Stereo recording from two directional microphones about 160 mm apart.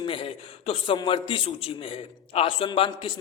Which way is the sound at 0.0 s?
35° left (ahead or behind).